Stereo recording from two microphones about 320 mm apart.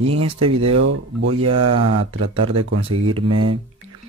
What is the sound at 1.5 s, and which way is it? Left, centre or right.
Speech, right.